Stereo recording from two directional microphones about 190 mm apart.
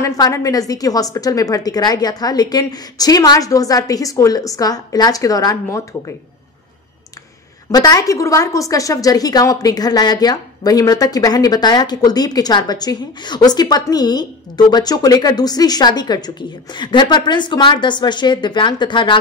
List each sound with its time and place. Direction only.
0.0 s a woman's voice: 15° left (ahead or behind)
7.7 s a woman's voice: 20° left (ahead or behind)